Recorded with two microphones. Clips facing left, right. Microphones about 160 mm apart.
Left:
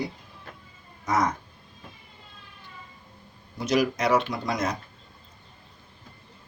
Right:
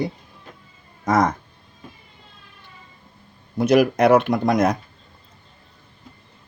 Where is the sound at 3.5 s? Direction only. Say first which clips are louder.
Right 8 dB; 55° right (ahead or behind).